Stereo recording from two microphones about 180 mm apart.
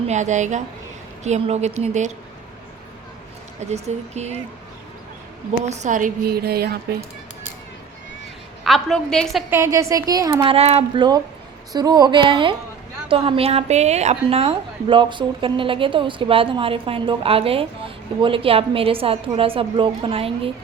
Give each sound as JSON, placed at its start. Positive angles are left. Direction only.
{"t": 0.1, "sound": "a woman's voice", "side_deg": -40}
{"t": 3.6, "sound": "a woman's voice", "side_deg": -40}
{"t": 5.6, "sound": "speech", "side_deg": -40}
{"t": 8.6, "sound": "a woman's voice", "side_deg": 0}
{"t": 9.5, "sound": "a woman's voice", "side_deg": -15}